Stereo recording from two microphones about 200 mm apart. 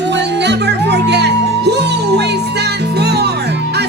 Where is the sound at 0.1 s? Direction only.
60° right (ahead or behind).